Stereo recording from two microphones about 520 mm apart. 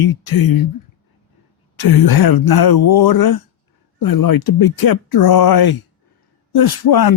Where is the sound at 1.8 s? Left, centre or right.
Left.